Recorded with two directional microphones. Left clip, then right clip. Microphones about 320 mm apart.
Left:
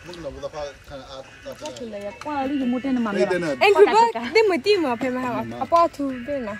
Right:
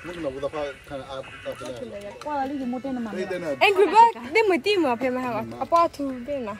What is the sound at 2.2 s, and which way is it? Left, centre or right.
Speech, left.